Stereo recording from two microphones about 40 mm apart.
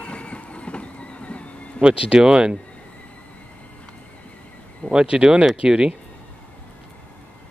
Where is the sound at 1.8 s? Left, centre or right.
Right.